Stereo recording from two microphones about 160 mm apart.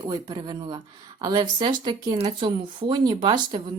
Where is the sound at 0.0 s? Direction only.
25° right (ahead or behind).